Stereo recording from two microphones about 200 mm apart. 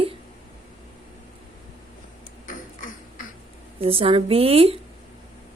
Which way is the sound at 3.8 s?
30° right (ahead or behind).